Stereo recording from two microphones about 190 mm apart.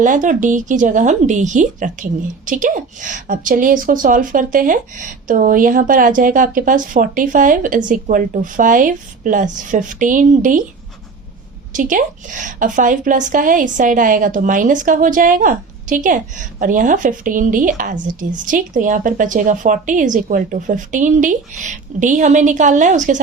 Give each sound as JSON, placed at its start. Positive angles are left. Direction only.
{"t": 0.0, "sound": "a woman's voice", "side_deg": -40}
{"t": 11.7, "sound": "a woman's voice", "side_deg": -45}